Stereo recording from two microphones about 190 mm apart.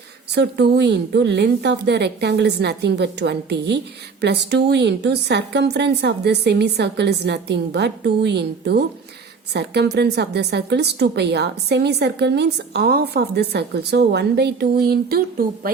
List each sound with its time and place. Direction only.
0.3 s a woman's voice: 60° right (ahead or behind)